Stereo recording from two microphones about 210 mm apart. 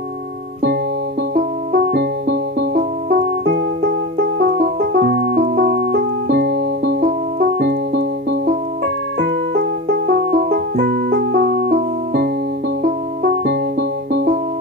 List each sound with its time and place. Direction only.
1.3 s music: 45° right (ahead or behind)